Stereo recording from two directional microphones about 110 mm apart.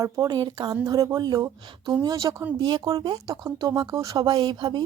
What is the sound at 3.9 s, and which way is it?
Speech, 30° right (ahead or behind).